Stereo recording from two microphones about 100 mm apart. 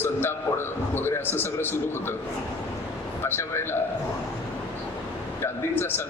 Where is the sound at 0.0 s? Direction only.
20° left (ahead or behind).